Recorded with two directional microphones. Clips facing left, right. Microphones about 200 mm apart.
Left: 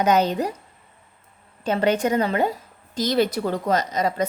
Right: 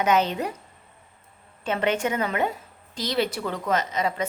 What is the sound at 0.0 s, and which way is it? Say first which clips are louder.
Speech: left 3 dB; 40° left (ahead or behind).